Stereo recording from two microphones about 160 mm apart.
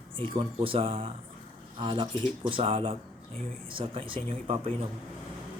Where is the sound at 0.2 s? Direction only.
30° right (ahead or behind).